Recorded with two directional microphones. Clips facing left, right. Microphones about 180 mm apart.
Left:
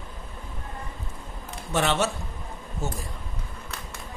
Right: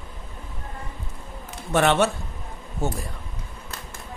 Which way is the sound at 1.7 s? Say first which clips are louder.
Right 5 dB; 55° right (ahead or behind).